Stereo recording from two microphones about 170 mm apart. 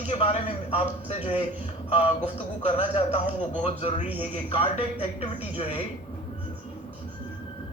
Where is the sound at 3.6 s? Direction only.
40° left (ahead or behind).